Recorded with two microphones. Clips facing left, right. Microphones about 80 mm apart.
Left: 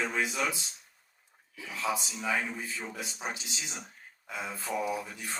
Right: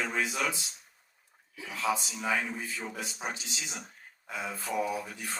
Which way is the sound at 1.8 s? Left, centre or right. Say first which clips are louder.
Right 2 dB; right.